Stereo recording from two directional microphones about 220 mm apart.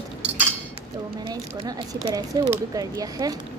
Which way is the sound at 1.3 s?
15° right (ahead or behind).